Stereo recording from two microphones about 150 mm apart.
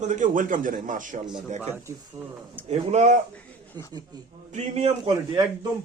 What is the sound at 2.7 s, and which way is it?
Speech, 50° right (ahead or behind).